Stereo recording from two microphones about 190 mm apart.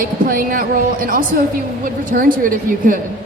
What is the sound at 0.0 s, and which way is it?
Speech, 50° right (ahead or behind).